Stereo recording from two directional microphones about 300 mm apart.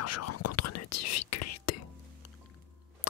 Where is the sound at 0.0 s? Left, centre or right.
Left.